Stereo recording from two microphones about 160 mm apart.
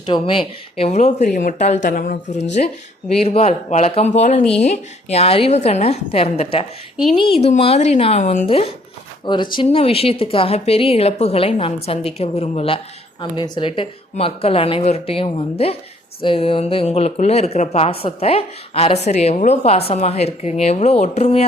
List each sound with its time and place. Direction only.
0.0 s speech: 30° left (ahead or behind); by 2.4 s 60° left (ahead or behind)
2.4 s speech: 45° left (ahead or behind)
8.2 s speech: 55° left (ahead or behind)
8.4 s speech: 40° left (ahead or behind)